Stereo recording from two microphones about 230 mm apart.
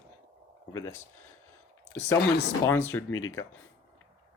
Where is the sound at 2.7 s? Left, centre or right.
Centre.